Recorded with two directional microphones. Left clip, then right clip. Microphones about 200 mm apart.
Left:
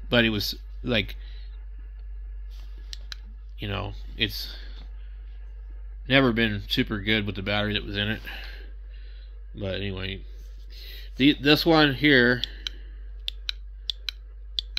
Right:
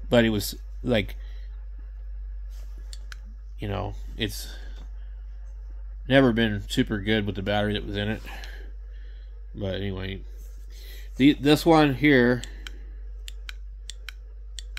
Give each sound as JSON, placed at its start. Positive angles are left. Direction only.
{"t": 0.1, "sound": "speech", "side_deg": -15}
{"t": 2.9, "sound": "clicking", "side_deg": -10}
{"t": 6.0, "sound": "speech", "side_deg": -10}